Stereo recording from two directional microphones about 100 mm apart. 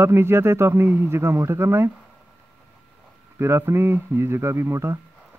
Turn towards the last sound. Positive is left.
turn(degrees=-25)  # may be behind; listen again after turning